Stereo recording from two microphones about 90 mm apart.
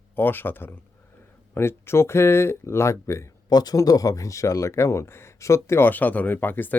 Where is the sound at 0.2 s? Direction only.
25° left (ahead or behind).